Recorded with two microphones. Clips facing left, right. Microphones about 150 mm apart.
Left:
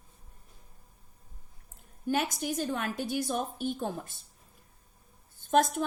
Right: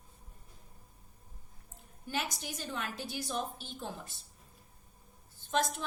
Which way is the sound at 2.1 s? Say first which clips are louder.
Left 8 dB; 50° left (ahead or behind).